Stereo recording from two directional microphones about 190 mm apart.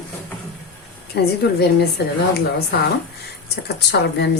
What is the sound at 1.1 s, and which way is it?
Speech, 60° left (ahead or behind).